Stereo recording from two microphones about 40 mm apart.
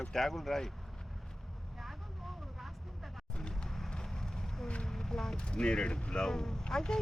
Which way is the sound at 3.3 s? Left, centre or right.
Left.